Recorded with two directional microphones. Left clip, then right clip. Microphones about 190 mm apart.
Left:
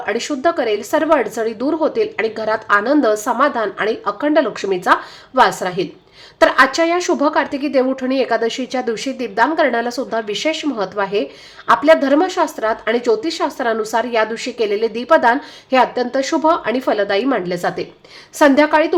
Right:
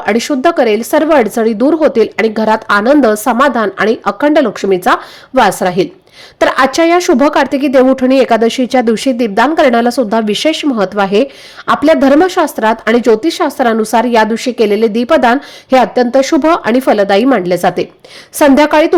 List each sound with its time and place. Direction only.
0.0 s speech: 35° right (ahead or behind)